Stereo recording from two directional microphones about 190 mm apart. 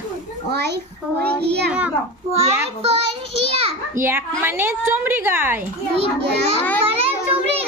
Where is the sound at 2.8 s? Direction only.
30° right (ahead or behind).